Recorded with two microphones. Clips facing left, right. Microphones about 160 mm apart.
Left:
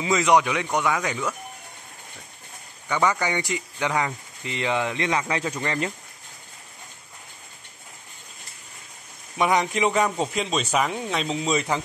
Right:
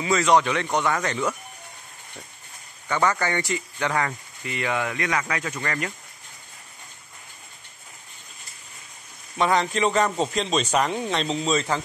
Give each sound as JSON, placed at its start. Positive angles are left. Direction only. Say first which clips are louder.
{"t": 0.0, "sound": "speech", "louder": "even", "side_deg": 15}
{"t": 2.9, "sound": "speech", "louder": "even", "side_deg": 15}
{"t": 9.4, "sound": "speech", "louder": "even", "side_deg": 15}